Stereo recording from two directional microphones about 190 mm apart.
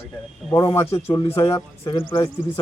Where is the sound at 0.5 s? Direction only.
15° left (ahead or behind).